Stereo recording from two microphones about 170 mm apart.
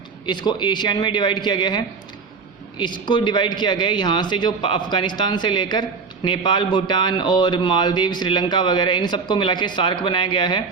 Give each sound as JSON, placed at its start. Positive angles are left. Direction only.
{"t": 0.3, "sound": "speech", "side_deg": 25}